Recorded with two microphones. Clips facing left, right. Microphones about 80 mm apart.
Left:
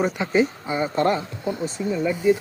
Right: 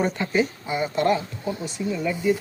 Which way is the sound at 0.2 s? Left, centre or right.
Left.